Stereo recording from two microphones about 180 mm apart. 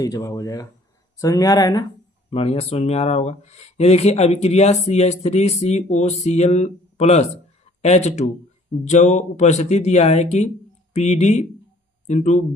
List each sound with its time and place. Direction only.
0.0 s speech: 20° left (ahead or behind)
2.3 s speech: 35° left (ahead or behind)